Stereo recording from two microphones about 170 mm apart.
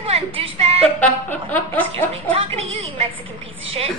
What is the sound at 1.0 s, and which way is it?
Speech, 10° left (ahead or behind).